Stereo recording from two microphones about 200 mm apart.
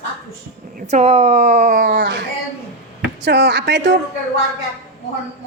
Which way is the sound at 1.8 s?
60° right (ahead or behind).